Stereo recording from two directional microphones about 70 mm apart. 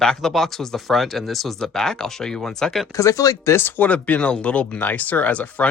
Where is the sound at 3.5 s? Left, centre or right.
Left.